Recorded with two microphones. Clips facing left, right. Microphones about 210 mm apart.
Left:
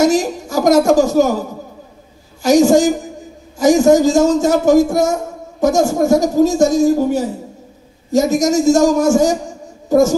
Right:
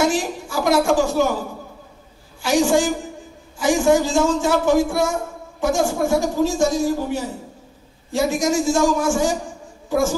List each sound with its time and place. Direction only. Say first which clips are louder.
0.0 s a man's voice: left 6 dB; 40° left (ahead or behind)
2.4 s a man's voice: left 7 dB; 40° left (ahead or behind)